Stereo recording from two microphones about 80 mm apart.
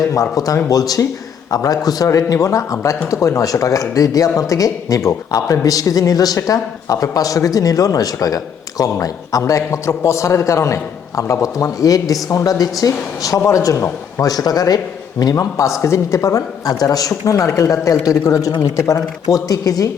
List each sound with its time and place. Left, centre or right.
0.1 s a man's voice: left